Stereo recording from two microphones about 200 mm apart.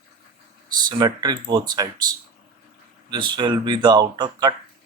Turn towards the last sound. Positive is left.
turn(degrees=-20)  # may be behind; listen again after turning